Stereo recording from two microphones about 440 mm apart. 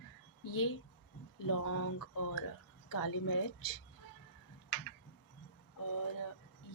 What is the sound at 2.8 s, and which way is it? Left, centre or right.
Speech, left.